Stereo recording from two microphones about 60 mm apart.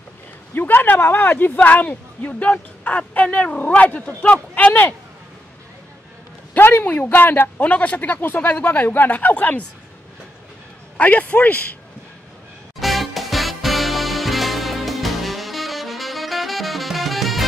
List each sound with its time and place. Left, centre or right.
0.6 s speech: left
6.5 s speech: left
11.0 s speech: left
12.7 s music: centre